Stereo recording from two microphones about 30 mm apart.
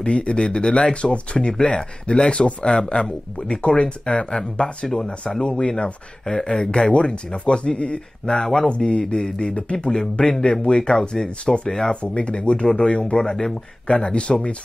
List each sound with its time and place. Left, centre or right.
0.0 s speech: left
4.8 s speech: centre
5.6 s speech: left
8.4 s speech: centre
8.6 s speech: left
9.0 s speech: left
11.9 s speech: left